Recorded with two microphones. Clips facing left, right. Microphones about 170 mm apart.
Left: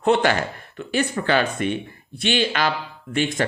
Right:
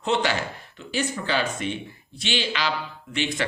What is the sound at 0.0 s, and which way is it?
Speech, 55° left (ahead or behind).